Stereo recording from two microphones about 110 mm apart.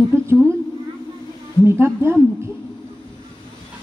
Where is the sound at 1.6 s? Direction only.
25° right (ahead or behind).